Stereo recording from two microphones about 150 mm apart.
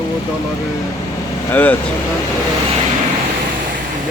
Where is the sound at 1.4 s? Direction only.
10° left (ahead or behind).